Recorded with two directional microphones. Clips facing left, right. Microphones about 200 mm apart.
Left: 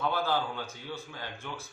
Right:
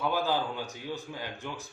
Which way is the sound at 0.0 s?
15° right (ahead or behind).